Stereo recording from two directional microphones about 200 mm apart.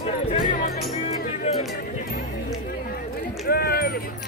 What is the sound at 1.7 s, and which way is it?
Speech, 50° left (ahead or behind).